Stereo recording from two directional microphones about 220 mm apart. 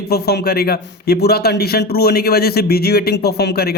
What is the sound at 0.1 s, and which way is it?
A man's voice, 45° left (ahead or behind).